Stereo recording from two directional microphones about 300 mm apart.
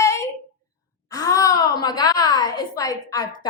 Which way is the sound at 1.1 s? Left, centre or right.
Centre.